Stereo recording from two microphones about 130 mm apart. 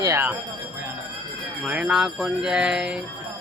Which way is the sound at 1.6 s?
5° right (ahead or behind).